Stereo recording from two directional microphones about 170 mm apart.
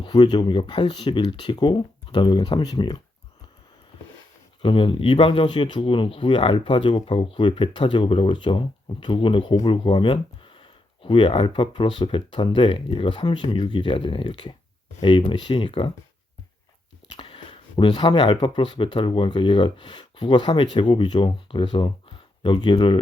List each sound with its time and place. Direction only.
0.0 s speech: 25° left (ahead or behind)
4.6 s speech: 30° left (ahead or behind)
17.1 s speech: 30° left (ahead or behind)